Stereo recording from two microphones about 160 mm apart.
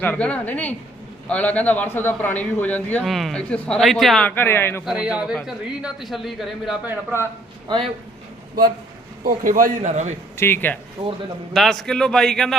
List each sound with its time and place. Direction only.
0.0 s a man's voice: 10° left (ahead or behind)
4.9 s a man's voice: 5° right (ahead or behind)
6.8 s a man's voice: 15° right (ahead or behind)
9.2 s a man's voice: 60° right (ahead or behind)
10.3 s a man's voice: 15° left (ahead or behind)
11.0 s a man's voice: 30° right (ahead or behind)
11.5 s a man's voice: centre (ahead or behind)